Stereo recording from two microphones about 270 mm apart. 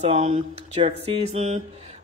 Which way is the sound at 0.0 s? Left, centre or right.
Right.